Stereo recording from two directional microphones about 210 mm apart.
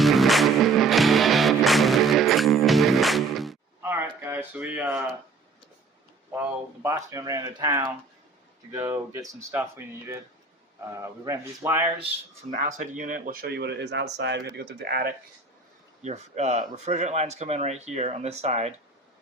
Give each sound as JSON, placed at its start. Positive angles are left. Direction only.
{"t": 0.0, "sound": "music", "side_deg": 0}
{"t": 4.2, "sound": "speech", "side_deg": -10}
{"t": 6.3, "sound": "speech", "side_deg": -10}
{"t": 12.5, "sound": "speech", "side_deg": -40}
{"t": 16.0, "sound": "speech", "side_deg": -30}